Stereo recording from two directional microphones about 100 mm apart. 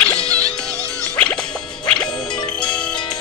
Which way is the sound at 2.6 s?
10° left (ahead or behind).